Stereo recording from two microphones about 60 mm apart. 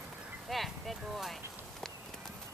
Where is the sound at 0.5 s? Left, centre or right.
Centre.